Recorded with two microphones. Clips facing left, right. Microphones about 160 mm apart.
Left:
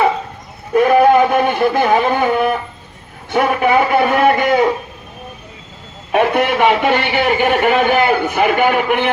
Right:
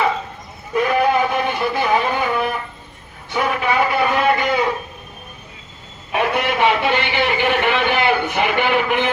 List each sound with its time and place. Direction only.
0.7 s a sound: 50° left (ahead or behind)
3.2 s a man's voice: 55° left (ahead or behind)
6.1 s a man's voice: 50° left (ahead or behind)